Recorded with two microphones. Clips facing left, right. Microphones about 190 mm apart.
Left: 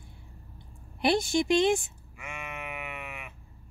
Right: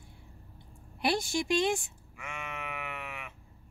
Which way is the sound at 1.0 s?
20° left (ahead or behind).